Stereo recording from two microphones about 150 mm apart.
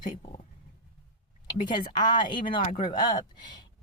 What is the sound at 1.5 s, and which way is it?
Speech, 30° left (ahead or behind).